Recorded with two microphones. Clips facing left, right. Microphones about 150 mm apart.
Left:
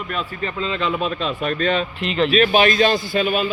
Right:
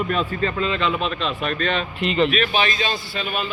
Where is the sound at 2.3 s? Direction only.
40° left (ahead or behind).